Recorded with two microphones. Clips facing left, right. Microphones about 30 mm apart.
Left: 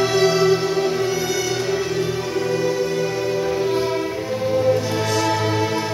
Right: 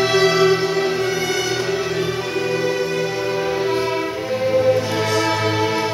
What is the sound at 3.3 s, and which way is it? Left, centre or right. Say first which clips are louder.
Music: right 1 dB; right.